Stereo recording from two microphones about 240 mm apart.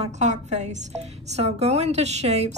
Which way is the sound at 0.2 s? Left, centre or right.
Right.